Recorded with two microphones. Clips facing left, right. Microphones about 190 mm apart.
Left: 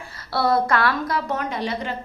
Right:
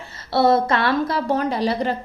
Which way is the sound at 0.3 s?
25° right (ahead or behind).